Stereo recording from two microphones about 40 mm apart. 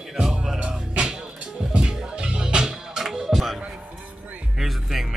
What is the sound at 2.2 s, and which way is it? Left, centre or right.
Music, right.